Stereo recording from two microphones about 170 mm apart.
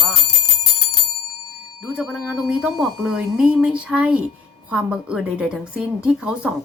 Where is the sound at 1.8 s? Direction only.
5° right (ahead or behind).